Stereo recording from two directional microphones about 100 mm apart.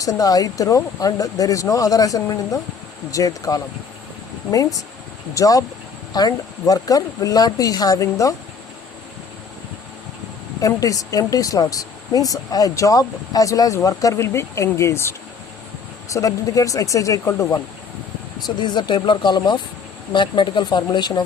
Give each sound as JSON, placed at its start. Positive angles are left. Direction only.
{"t": 0.0, "sound": "speech", "side_deg": 35}
{"t": 10.6, "sound": "speech", "side_deg": 35}
{"t": 18.4, "sound": "speech", "side_deg": 50}